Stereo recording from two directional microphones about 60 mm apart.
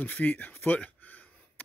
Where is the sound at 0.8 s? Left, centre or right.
Left.